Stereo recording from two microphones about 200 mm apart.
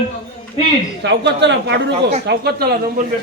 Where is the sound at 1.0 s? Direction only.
60° right (ahead or behind).